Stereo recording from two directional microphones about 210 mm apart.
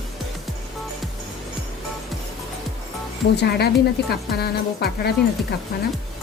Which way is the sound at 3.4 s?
50° left (ahead or behind).